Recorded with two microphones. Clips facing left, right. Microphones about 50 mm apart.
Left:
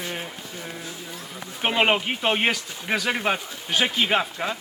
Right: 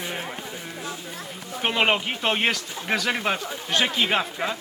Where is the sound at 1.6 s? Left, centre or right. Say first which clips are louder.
Left 1 dB; centre.